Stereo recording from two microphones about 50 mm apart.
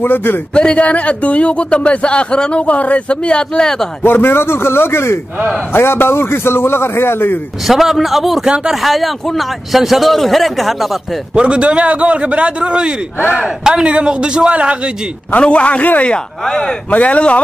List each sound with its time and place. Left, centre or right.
0.0 s speech: left
0.6 s a man's voice: left
4.0 s a man's voice: left
7.6 s a man's voice: centre
11.3 s a man's voice: right
15.3 s a man's voice: left
16.1 s speech: centre
16.9 s a man's voice: left